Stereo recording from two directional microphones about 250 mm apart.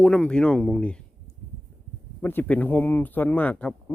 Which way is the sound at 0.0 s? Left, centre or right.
Centre.